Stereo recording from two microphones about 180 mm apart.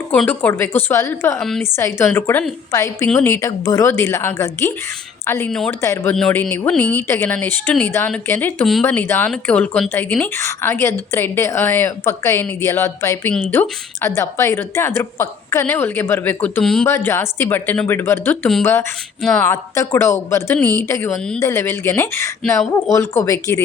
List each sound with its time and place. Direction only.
0.1 s a woman's voice: 10° left (ahead or behind)
1.4 s speech: centre (ahead or behind)
1.7 s a woman's voice: 15° left (ahead or behind)
5.5 s a woman's voice: centre (ahead or behind)